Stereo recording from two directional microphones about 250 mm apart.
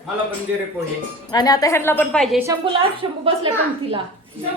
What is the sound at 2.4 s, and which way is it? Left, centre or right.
Speech, centre.